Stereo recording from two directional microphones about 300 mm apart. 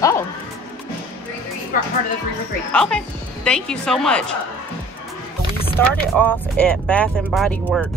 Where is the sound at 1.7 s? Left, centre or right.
Left.